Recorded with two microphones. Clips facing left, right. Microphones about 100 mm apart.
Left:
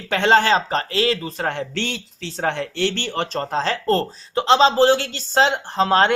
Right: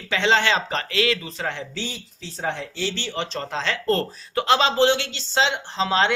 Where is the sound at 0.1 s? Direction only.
50° left (ahead or behind).